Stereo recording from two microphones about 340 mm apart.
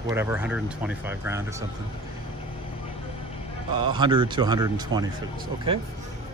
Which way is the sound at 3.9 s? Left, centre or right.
Centre.